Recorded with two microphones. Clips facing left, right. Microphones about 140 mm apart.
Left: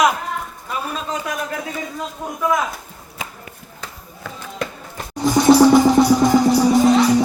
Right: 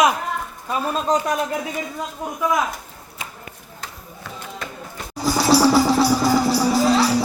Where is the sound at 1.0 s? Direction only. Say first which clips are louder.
Right 6 dB; 40° right (ahead or behind).